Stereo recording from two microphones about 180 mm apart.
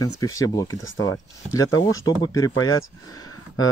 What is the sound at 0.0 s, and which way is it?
Speech, 20° left (ahead or behind).